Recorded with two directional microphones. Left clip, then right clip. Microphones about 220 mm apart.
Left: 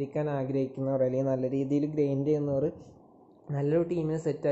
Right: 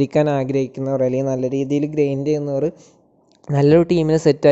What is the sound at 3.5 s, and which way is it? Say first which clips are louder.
Speech: right 14 dB; 40° right (ahead or behind).